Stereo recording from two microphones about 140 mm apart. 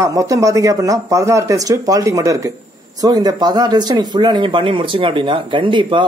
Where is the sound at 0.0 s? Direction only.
25° right (ahead or behind).